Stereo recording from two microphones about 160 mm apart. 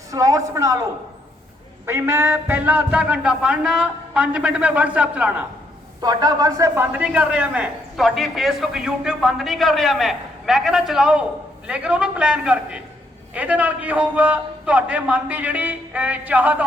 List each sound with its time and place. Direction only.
0.1 s a man's voice: 20° right (ahead or behind)
1.9 s music: 15° right (ahead or behind)
6.0 s a man's voice: 25° right (ahead or behind); by 11.3 s 5° right (ahead or behind)
11.7 s music: 5° right (ahead or behind)